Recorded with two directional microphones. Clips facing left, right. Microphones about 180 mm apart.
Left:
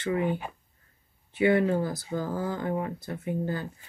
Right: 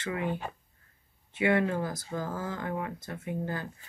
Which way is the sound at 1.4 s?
30° left (ahead or behind).